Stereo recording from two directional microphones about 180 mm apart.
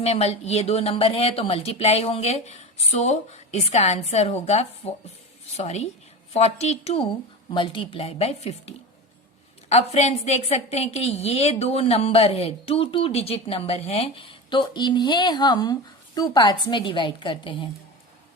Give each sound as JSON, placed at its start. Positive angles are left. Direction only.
{"t": 0.0, "sound": "a woman's voice", "side_deg": 35}